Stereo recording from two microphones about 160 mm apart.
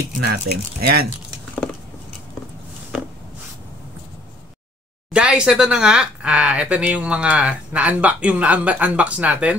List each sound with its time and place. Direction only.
0.2 s speech: 80° right
5.1 s speech: 5° right (ahead or behind)